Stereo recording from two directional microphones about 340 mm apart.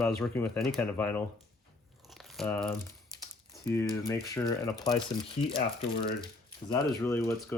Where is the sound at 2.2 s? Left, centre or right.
Centre.